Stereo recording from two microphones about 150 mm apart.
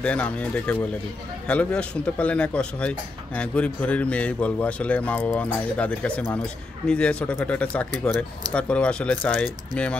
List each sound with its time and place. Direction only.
0.0 s speech: 10° left (ahead or behind)